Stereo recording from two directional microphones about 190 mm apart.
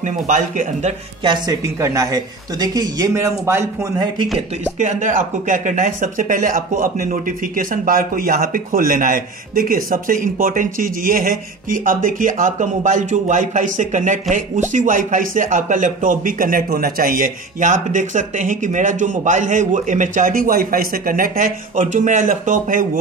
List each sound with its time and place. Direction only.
0.0 s a man's voice: 40° right (ahead or behind)
1.2 s speech: 20° right (ahead or behind)
4.7 s speech: 40° right (ahead or behind)